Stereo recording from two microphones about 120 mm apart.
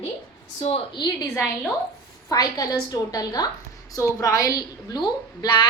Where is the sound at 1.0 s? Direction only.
40° left (ahead or behind).